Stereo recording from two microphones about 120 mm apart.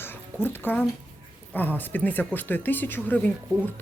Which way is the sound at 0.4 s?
15° left (ahead or behind).